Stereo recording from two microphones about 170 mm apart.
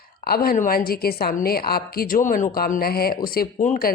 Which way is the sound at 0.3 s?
60° left (ahead or behind).